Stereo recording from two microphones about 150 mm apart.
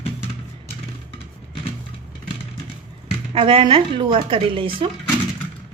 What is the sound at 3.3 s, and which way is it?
Speech, 35° right (ahead or behind).